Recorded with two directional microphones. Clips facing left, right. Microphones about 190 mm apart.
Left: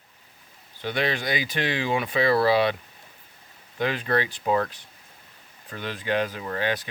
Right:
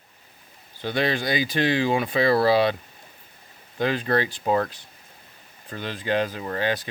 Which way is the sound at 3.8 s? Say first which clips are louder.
Right 2 dB; 35° right (ahead or behind).